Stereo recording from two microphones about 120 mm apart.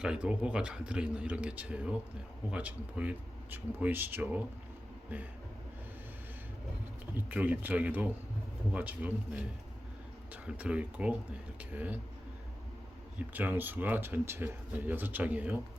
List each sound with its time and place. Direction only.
0.0 s speech: 5° right (ahead or behind)
7.3 s speech: 15° right (ahead or behind)
10.4 s speech: 10° right (ahead or behind)
13.3 s speech: 15° right (ahead or behind)